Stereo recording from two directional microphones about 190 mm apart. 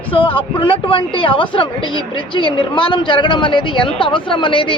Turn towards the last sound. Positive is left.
turn(degrees=25)  # may be behind; listen again after turning